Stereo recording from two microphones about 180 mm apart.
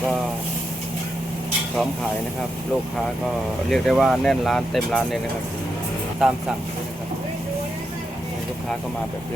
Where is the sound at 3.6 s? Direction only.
Centre (ahead or behind).